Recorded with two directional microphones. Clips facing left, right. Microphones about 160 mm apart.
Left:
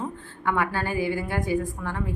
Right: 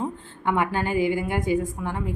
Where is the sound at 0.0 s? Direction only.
20° right (ahead or behind).